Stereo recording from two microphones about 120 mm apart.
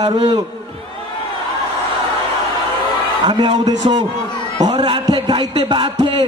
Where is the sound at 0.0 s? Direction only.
35° right (ahead or behind).